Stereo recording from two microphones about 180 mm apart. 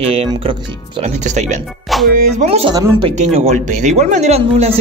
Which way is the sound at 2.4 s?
35° right (ahead or behind).